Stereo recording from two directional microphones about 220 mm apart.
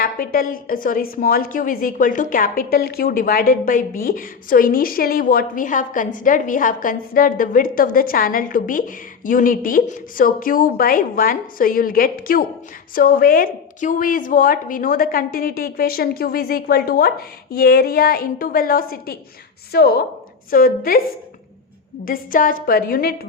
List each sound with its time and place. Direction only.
0.0 s a woman's voice: 40° left (ahead or behind)
22.0 s a woman's voice: 40° left (ahead or behind)